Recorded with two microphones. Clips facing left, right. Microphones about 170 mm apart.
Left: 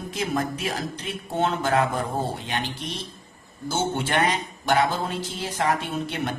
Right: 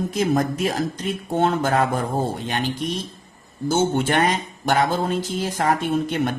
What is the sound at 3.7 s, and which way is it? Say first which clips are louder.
A man's voice: right 6 dB; 45° right (ahead or behind).